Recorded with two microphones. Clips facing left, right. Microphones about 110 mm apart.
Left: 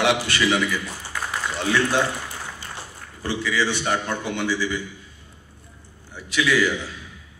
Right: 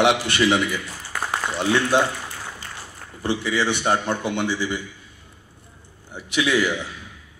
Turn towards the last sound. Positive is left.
turn(degrees=-20)  # may be behind; listen again after turning